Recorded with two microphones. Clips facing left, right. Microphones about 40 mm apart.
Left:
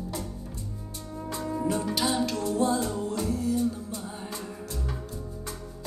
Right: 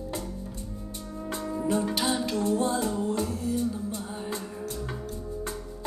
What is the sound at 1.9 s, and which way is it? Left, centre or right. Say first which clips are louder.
Music: left 1 dB; right.